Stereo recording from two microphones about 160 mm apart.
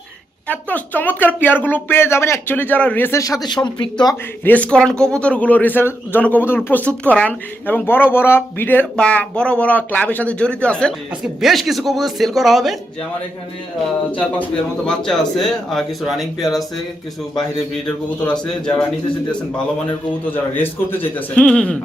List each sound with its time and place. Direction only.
0.4 s a man's voice: 10° left (ahead or behind); by 4.1 s 30° left (ahead or behind)
4.4 s a man's voice: 10° left (ahead or behind)
14.1 s speech: 10° left (ahead or behind)
17.8 s speech: 5° left (ahead or behind)
20.3 s a man's voice: 10° left (ahead or behind)